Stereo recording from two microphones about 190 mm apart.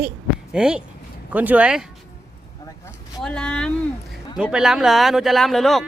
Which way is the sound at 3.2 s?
5° left (ahead or behind).